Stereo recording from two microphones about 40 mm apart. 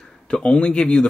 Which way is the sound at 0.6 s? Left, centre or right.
Left.